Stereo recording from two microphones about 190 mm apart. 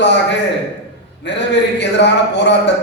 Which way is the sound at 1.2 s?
65° left (ahead or behind).